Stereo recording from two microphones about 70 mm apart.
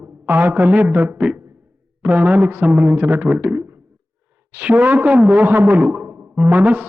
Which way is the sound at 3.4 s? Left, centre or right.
Right.